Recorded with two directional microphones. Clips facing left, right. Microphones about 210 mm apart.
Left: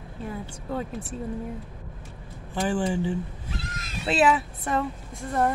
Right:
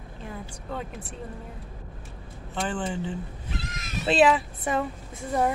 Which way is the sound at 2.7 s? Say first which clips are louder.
Left 7 dB; 10° left (ahead or behind).